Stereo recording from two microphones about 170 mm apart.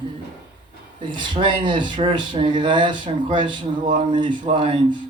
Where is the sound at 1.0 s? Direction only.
30° right (ahead or behind).